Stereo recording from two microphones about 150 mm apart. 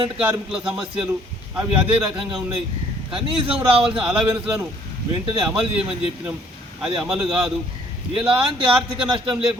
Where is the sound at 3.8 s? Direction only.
5° right (ahead or behind).